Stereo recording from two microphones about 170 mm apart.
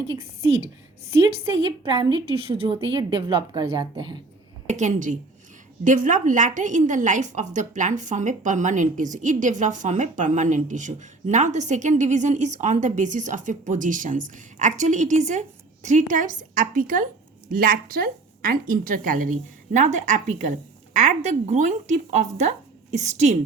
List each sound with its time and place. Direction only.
1.9 s a woman's voice: 30° right (ahead or behind)
4.6 s a woman's voice: 45° right (ahead or behind)